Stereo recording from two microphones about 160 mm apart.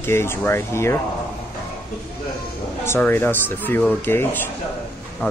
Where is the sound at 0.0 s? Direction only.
15° left (ahead or behind).